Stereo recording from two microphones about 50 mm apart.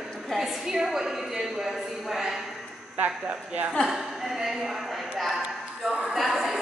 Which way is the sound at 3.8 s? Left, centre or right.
Centre.